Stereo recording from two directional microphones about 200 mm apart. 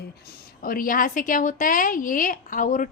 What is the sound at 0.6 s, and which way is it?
A woman's voice, 45° left (ahead or behind).